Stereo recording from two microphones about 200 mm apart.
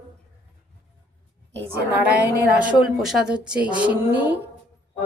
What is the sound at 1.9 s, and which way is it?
A woman's voice, 5° right (ahead or behind).